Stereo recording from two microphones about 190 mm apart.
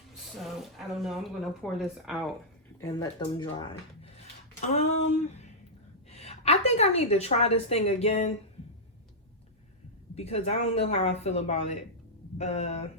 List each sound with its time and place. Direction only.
0.3 s speech: centre (ahead or behind)
2.8 s a woman's voice: 20° left (ahead or behind); by 8.3 s 35° left (ahead or behind)
10.2 s a woman's voice: 35° left (ahead or behind)